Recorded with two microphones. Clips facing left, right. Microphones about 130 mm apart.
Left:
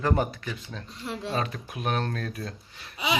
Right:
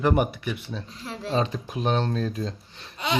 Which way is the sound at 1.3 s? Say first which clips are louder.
Right 8 dB; 20° right (ahead or behind).